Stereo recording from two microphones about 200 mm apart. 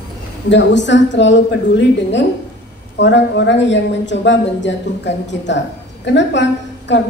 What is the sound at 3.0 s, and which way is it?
A woman's voice, 60° left (ahead or behind).